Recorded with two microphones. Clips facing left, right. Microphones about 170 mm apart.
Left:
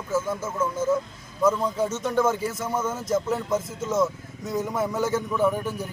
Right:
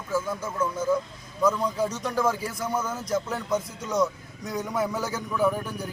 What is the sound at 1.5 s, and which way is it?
Speech, 5° left (ahead or behind).